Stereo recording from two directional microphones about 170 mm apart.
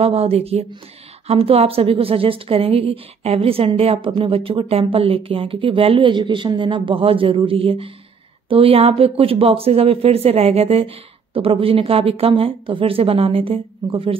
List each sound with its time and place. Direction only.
0.0 s a woman's voice: 35° right (ahead or behind)